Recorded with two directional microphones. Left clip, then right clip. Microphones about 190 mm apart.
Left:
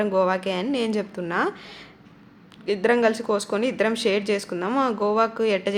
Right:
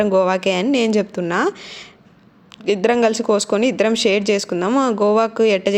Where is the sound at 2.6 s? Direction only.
30° right (ahead or behind).